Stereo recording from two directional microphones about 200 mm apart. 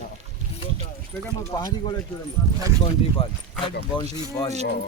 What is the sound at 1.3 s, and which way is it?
Speech, 20° left (ahead or behind).